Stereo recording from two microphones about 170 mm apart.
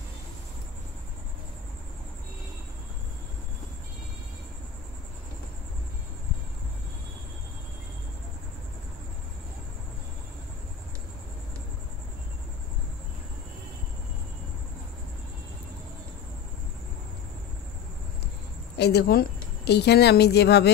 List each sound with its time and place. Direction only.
18.8 s speech: 75° left (ahead or behind)